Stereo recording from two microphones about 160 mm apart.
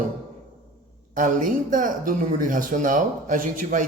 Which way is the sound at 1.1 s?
55° right (ahead or behind).